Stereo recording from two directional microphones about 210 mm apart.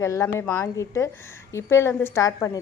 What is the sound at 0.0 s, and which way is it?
Speech, 15° left (ahead or behind).